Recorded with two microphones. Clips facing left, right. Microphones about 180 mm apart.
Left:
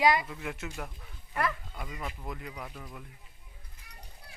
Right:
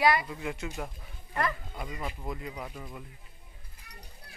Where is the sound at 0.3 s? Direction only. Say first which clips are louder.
Right 3 dB; centre (ahead or behind).